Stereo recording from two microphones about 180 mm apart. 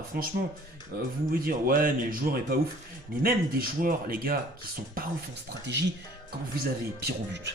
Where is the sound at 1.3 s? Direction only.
50° right (ahead or behind).